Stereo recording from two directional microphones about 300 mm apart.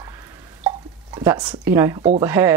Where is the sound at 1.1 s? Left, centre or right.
Centre.